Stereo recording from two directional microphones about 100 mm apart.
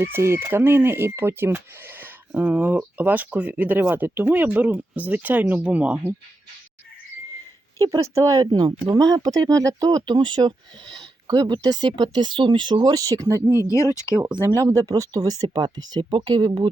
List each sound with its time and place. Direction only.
0.0 s speech: 25° right (ahead or behind)
7.8 s speech: 35° right (ahead or behind)
13.5 s speech: 30° left (ahead or behind)
14.4 s speech: 30° right (ahead or behind); by 16.6 s 50° right (ahead or behind)